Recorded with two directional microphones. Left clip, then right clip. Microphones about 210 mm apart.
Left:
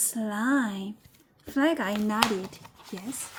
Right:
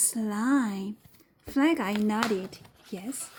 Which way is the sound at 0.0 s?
20° right (ahead or behind).